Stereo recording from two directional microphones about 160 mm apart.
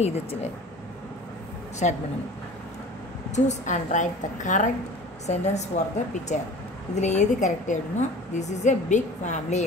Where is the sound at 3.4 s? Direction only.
50° left (ahead or behind).